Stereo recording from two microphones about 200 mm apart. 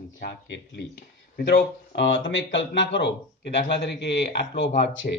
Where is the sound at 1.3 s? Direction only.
60° left (ahead or behind).